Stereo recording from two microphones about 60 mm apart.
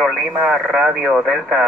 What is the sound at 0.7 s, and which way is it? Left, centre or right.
Speech, centre.